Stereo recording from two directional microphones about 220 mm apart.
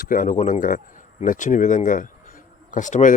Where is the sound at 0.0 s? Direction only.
40° left (ahead or behind).